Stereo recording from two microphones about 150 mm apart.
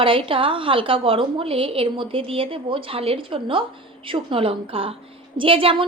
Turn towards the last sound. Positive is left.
turn(degrees=-35)  # may be behind; listen again after turning